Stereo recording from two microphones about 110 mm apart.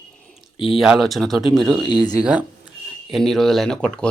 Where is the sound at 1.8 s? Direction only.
40° left (ahead or behind).